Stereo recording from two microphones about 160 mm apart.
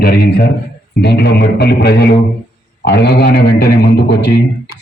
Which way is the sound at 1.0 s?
90° left.